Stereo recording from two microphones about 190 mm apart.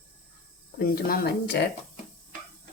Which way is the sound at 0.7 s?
55° left (ahead or behind).